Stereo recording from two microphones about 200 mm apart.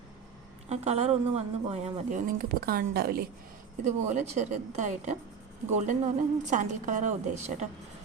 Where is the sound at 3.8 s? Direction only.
35° right (ahead or behind).